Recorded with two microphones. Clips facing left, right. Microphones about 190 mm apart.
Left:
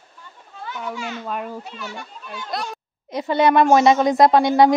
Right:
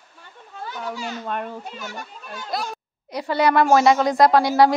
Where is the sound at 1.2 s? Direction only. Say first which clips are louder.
Even; 5° left (ahead or behind).